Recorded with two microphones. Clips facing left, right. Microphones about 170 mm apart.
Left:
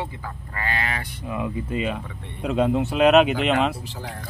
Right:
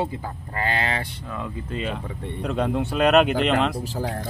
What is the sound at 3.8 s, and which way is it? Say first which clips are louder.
Speech: right 7 dB; 40° right (ahead or behind).